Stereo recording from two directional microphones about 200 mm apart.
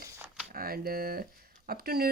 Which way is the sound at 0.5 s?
45° right (ahead or behind).